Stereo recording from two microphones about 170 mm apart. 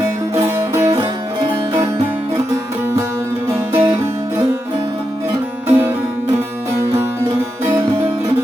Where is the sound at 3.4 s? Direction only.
15° right (ahead or behind).